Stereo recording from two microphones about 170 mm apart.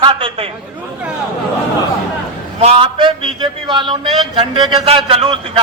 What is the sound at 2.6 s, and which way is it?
A man's voice, 35° right (ahead or behind).